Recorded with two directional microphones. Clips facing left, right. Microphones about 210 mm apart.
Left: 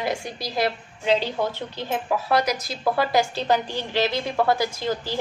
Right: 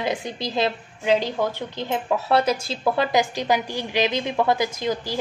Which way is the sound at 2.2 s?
30° right (ahead or behind).